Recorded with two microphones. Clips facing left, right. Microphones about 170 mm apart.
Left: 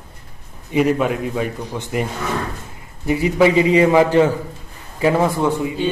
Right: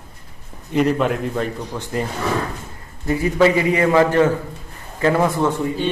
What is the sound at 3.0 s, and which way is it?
A man's voice, 15° left (ahead or behind).